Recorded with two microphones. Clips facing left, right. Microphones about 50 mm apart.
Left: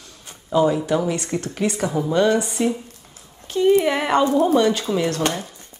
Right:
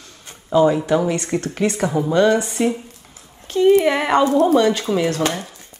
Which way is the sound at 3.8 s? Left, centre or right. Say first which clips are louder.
Right 2 dB; centre.